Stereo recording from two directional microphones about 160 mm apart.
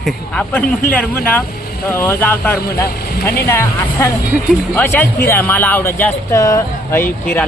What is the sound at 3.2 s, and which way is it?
Speech, 75° left (ahead or behind).